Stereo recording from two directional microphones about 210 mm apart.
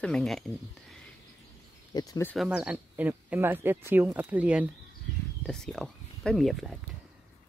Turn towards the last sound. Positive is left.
turn(degrees=0)  # may be behind; listen again after turning